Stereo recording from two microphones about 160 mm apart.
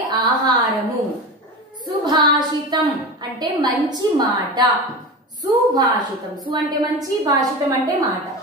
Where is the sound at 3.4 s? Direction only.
25° right (ahead or behind).